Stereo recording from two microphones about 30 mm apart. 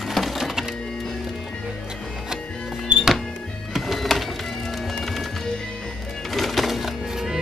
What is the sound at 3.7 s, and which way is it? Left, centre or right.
Music, centre.